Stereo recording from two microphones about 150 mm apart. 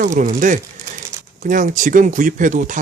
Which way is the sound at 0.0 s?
65° right (ahead or behind).